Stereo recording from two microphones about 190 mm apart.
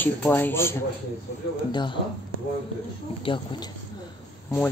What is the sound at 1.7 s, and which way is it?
Speech, 25° left (ahead or behind).